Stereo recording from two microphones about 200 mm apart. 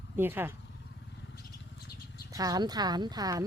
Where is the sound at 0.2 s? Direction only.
10° right (ahead or behind).